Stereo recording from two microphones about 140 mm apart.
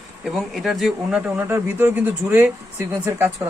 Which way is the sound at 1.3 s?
15° right (ahead or behind).